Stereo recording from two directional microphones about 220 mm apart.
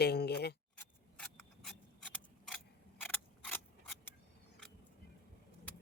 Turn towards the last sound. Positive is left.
turn(degrees=10)  # may be behind; listen again after turning